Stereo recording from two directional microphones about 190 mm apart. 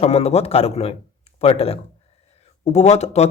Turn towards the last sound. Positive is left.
turn(degrees=35)  # may be behind; listen again after turning